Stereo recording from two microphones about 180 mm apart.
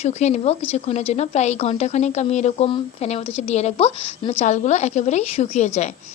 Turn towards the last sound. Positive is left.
turn(degrees=40)  # may be behind; listen again after turning